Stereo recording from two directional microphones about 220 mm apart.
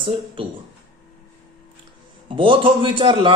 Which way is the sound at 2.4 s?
25° right (ahead or behind).